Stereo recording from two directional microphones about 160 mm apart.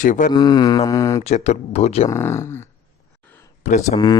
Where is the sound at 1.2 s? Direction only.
45° left (ahead or behind).